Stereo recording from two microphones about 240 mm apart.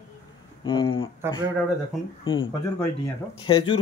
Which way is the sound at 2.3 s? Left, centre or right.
Left.